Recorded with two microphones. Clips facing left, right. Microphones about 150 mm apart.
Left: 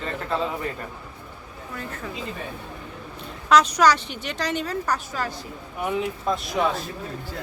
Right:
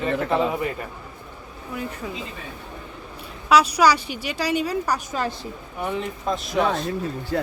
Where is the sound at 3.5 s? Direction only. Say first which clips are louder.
Right 1 dB; 10° right (ahead or behind).